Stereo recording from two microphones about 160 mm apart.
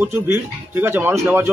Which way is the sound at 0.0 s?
15° right (ahead or behind).